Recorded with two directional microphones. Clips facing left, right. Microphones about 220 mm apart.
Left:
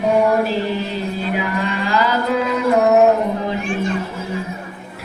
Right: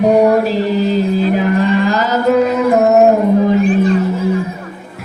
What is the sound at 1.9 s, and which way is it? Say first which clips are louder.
Mantra: right 5 dB; 45° right (ahead or behind).